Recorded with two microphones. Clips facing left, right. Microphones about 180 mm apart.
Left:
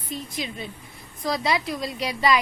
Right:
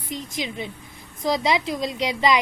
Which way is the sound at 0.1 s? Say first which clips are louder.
Right 2 dB; 20° right (ahead or behind).